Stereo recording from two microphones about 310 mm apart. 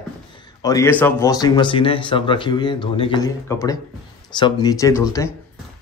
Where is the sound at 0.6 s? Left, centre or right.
Centre.